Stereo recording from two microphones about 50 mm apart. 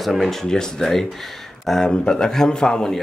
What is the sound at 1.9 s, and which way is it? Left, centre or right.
Speech, centre.